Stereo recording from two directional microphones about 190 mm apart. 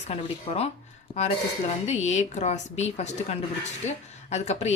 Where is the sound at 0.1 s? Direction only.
30° left (ahead or behind).